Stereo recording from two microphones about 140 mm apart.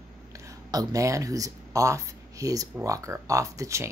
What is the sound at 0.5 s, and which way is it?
Speech, 25° right (ahead or behind).